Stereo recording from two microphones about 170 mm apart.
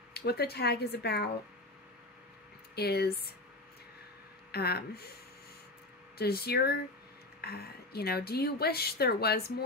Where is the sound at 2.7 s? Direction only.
70° left (ahead or behind).